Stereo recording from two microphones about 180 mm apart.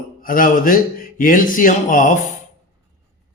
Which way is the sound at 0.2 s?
50° left (ahead or behind).